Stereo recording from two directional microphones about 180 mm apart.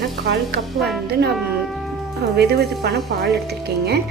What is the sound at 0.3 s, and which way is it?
Speech, 65° right (ahead or behind).